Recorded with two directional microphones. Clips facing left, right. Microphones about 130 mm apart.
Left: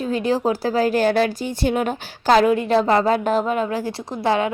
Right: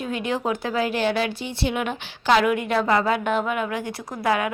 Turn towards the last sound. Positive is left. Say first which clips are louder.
# left 3 dB
turn(degrees=30)  # may be behind; listen again after turning